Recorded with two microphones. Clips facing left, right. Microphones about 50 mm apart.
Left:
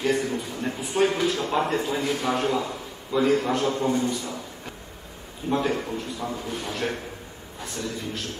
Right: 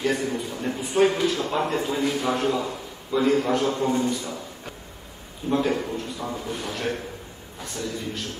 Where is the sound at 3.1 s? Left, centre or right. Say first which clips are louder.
Right 1 dB; centre.